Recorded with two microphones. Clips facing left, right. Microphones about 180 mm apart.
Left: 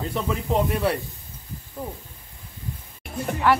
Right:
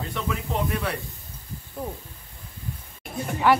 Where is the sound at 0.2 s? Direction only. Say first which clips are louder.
Left 3 dB; 30° left (ahead or behind).